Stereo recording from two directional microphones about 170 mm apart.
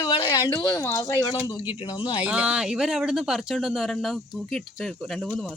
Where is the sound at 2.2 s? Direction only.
10° right (ahead or behind).